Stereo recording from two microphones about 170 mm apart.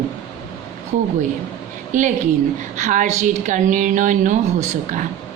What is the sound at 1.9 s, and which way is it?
A woman's voice, 50° right (ahead or behind).